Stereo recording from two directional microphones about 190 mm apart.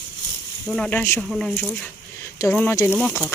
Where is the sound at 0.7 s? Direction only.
5° left (ahead or behind).